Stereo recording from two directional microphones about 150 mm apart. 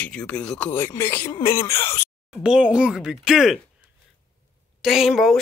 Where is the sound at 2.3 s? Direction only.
5° right (ahead or behind).